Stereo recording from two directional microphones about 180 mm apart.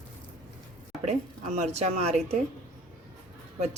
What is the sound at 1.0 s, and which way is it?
Speech, 40° right (ahead or behind).